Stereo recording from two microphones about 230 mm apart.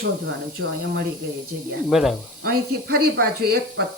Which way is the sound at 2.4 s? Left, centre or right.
Right.